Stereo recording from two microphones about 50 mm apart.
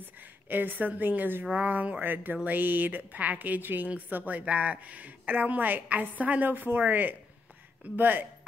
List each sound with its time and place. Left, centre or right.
0.5 s a woman's voice: right
1.4 s a woman's voice: right